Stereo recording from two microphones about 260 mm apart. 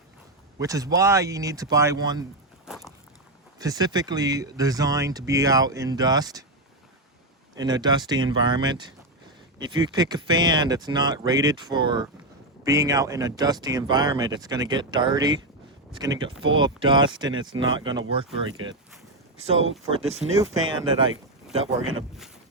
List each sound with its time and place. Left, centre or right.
0.6 s speech: centre
2.6 s walk: centre
3.6 s speech: centre
7.5 s speech: centre
20.1 s speech: right
21.6 s speech: right